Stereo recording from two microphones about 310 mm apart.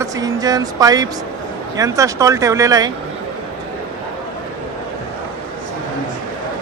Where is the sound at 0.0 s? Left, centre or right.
Centre.